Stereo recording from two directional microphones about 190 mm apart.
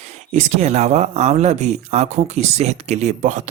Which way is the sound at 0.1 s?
35° right (ahead or behind).